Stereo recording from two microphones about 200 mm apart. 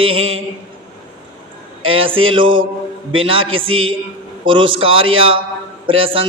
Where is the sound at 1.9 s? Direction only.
25° right (ahead or behind).